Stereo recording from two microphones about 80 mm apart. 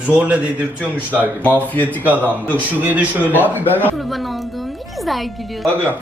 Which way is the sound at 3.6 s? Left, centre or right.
Left.